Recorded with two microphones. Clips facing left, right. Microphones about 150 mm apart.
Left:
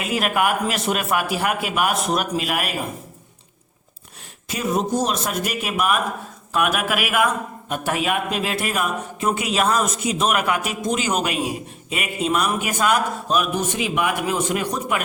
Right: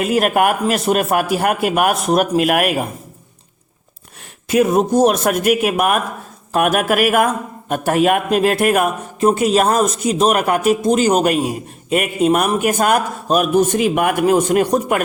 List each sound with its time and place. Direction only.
0.0 s a man's voice: 45° right (ahead or behind)
4.4 s a man's voice: 55° right (ahead or behind)
9.2 s a man's voice: 40° right (ahead or behind)